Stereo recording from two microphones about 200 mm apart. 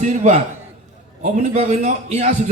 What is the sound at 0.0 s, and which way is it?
A man's voice, 35° right (ahead or behind).